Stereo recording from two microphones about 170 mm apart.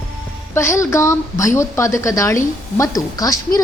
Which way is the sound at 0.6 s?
15° left (ahead or behind).